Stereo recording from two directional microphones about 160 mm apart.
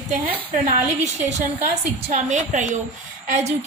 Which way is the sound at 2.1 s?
50° right (ahead or behind).